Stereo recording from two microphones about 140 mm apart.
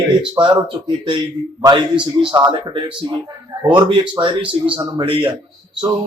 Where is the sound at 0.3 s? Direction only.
35° right (ahead or behind).